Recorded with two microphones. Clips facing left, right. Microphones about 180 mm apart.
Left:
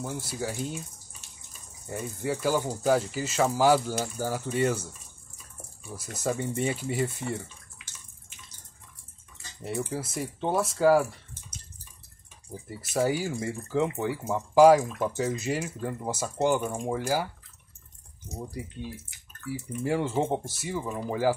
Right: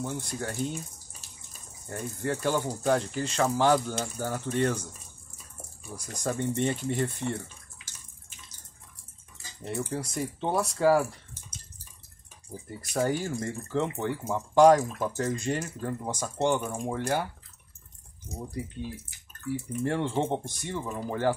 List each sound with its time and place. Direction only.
0.0 s speech: 5° left (ahead or behind)
1.9 s speech: 10° left (ahead or behind)
5.9 s speech: 5° left (ahead or behind)
9.6 s speech: 5° left (ahead or behind)
12.6 s speech: 5° left (ahead or behind)
19.5 s speech: 5° left (ahead or behind)